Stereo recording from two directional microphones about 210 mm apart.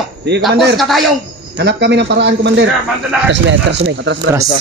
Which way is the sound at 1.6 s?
55° right (ahead or behind).